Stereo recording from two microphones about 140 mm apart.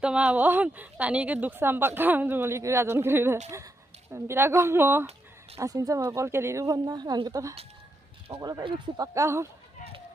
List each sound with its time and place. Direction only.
0.0 s a woman's voice: 10° right (ahead or behind)